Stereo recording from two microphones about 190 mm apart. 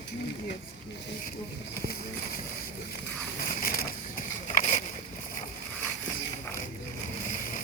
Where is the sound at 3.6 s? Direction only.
50° left (ahead or behind).